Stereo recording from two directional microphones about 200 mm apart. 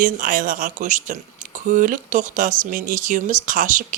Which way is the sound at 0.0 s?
45° right (ahead or behind).